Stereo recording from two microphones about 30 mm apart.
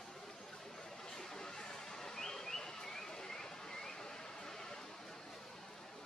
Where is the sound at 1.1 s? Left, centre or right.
Centre.